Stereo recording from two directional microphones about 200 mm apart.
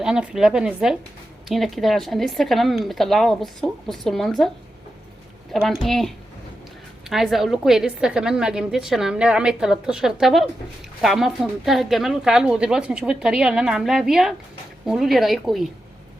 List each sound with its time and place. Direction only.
0.0 s a woman's voice: 5° right (ahead or behind)
5.8 s a woman's voice: centre (ahead or behind)